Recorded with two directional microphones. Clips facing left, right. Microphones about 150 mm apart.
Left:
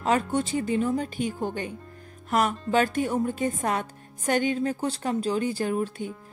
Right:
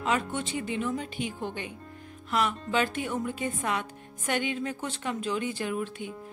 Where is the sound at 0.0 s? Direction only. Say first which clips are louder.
Left 5 dB; 40° left (ahead or behind).